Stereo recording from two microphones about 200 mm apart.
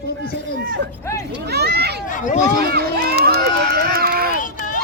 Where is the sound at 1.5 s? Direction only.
55° right (ahead or behind).